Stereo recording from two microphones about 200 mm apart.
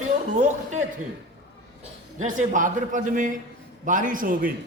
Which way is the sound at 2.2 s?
40° right (ahead or behind).